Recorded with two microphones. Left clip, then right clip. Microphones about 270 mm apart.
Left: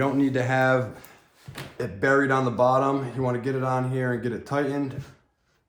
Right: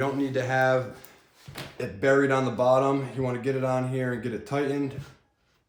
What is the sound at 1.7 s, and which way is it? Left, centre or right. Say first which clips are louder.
Speech: left 1 dB; centre.